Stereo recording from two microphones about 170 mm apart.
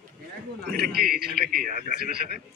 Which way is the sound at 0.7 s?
65° right (ahead or behind).